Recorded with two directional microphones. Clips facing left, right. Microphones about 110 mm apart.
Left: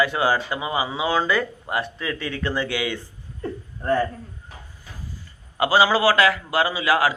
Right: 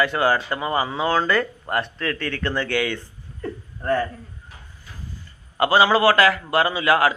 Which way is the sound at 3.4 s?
20° left (ahead or behind).